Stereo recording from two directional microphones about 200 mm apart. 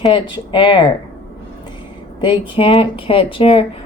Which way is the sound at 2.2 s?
25° left (ahead or behind).